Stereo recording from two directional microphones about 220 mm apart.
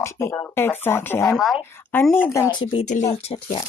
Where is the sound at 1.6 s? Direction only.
10° left (ahead or behind).